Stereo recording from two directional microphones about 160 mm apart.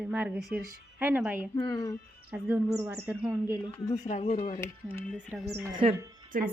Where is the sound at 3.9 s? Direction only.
45° left (ahead or behind).